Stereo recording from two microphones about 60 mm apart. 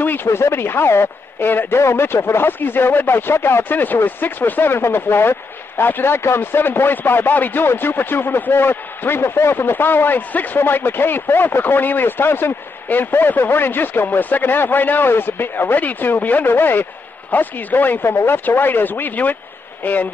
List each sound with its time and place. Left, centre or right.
0.0 s speech: left